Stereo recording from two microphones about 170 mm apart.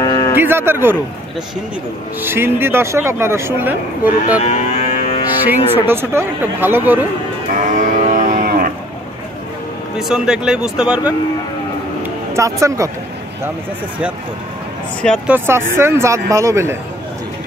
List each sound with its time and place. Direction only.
0.0 s a sound: 25° left (ahead or behind)
0.4 s speech: 15° right (ahead or behind)
2.2 s speech: 15° right (ahead or behind)
4.4 s cattle: 40° left (ahead or behind)
5.8 s speech: 15° right (ahead or behind)
7.5 s cattle: 50° right (ahead or behind)
9.9 s speech: 5° right (ahead or behind)
12.0 s a sound: 15° right (ahead or behind)
15.2 s speech: 10° right (ahead or behind)